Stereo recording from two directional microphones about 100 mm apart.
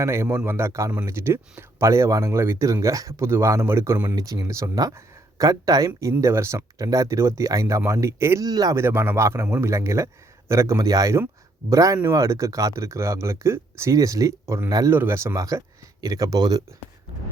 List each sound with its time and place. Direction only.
0.0 s speech: 25° right (ahead or behind)
4.1 s speech: 40° right (ahead or behind)
8.4 s speech: 40° right (ahead or behind)
8.7 s speech: 25° right (ahead or behind)